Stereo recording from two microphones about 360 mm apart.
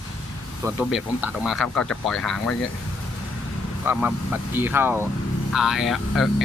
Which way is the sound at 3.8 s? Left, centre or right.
Centre.